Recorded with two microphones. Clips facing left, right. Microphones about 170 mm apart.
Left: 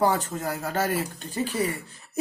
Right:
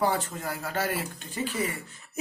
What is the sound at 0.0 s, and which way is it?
Speech, 40° left (ahead or behind).